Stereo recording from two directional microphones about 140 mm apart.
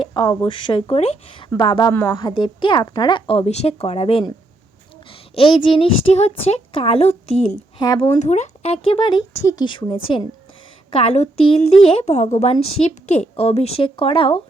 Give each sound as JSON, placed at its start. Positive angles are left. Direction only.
{"t": 0.0, "sound": "speech", "side_deg": 35}
{"t": 1.9, "sound": "speech", "side_deg": 15}
{"t": 2.1, "sound": "a woman's voice", "side_deg": 35}
{"t": 5.3, "sound": "a woman's voice", "side_deg": 40}
{"t": 7.8, "sound": "speech", "side_deg": 30}
{"t": 8.0, "sound": "speech", "side_deg": 50}
{"t": 10.9, "sound": "a woman's voice", "side_deg": 50}